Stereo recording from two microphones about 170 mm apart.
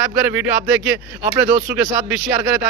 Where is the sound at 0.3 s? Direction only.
10° right (ahead or behind).